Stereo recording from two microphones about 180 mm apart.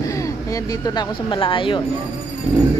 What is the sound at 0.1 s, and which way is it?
Speech, 20° left (ahead or behind).